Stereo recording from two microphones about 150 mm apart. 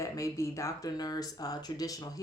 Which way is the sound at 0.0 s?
20° left (ahead or behind).